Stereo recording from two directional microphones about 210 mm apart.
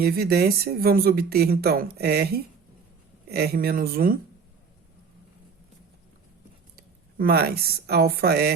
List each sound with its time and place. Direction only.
0.0 s speech: 50° right (ahead or behind)
6.7 s speech: 45° right (ahead or behind)